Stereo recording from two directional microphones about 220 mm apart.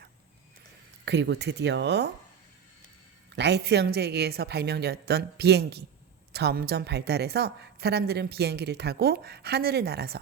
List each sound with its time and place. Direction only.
1.0 s a woman's voice: 50° right (ahead or behind)
3.3 s a woman's voice: 50° right (ahead or behind)